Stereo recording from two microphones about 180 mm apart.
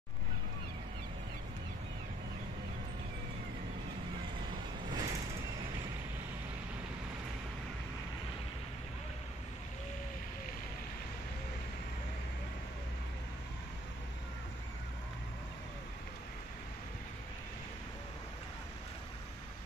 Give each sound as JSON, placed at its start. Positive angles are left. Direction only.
{"t": 4.5, "sound": "vehicle", "side_deg": -25}